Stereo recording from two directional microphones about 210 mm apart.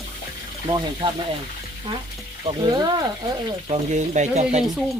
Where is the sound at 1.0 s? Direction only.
25° right (ahead or behind).